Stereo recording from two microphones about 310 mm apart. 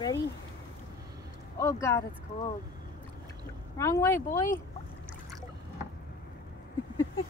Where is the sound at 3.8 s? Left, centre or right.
Centre.